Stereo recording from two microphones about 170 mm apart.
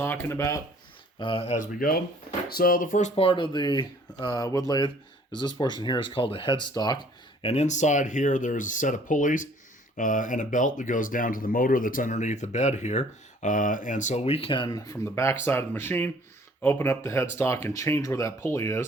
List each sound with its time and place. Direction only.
0.0 s speech: 15° left (ahead or behind)
1.2 s speech: 35° left (ahead or behind)
1.5 s speech: 55° left (ahead or behind)
3.2 s speech: 30° left (ahead or behind)
7.4 s speech: 40° left (ahead or behind); by 18.9 s 15° left (ahead or behind)